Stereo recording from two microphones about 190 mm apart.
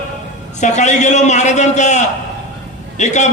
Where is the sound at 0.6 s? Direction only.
40° left (ahead or behind).